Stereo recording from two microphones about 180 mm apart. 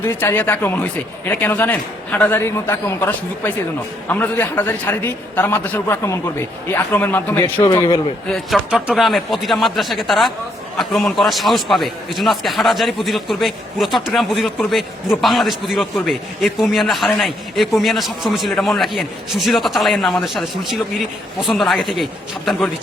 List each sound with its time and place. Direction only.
0.0 s speech: 10° left (ahead or behind)
7.7 s a man's voice: 25° left (ahead or behind)
8.3 s a man's voice: centre (ahead or behind)